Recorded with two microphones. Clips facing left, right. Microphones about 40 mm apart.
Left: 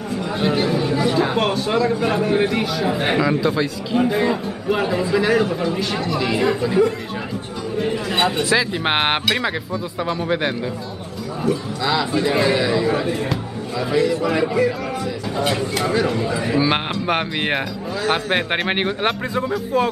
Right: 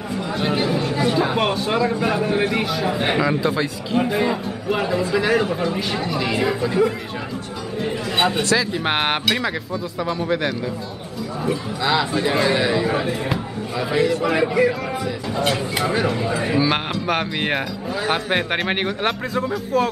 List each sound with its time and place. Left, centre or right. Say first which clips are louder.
0.3 s speech: left 2 dB; centre
4.8 s speech: left 1 dB; centre
5.1 s speech: left 2 dB; centre
11.4 s speech: left 1 dB; centre
15.7 s speech: left 1 dB; centre
16.5 s speech: left 2 dB; centre